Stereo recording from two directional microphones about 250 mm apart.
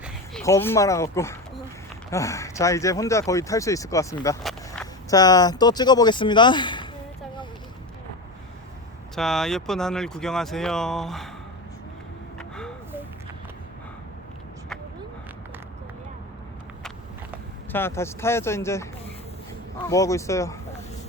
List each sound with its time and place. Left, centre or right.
0.4 s speech: centre
4.4 s walk: centre
5.1 s speech: centre
9.1 s speech: centre
12.4 s a sound: centre
17.7 s speech: centre
19.9 s speech: centre